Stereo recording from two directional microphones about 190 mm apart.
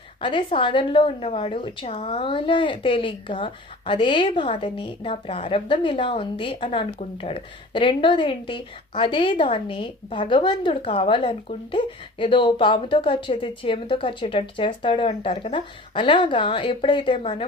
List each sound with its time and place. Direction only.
0.2 s a woman's voice: 25° left (ahead or behind)